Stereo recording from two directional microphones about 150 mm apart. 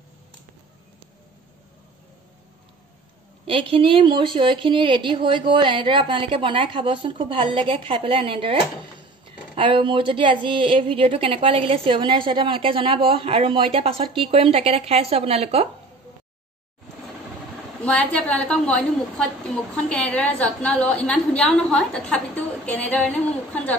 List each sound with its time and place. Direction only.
3.4 s a woman's voice: 35° right (ahead or behind)
9.6 s a woman's voice: 35° right (ahead or behind)
17.8 s a woman's voice: 5° left (ahead or behind)